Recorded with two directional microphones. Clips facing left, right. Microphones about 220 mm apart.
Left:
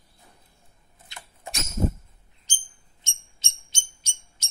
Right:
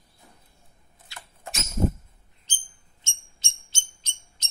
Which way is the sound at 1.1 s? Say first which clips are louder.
Left 1 dB; 15° left (ahead or behind).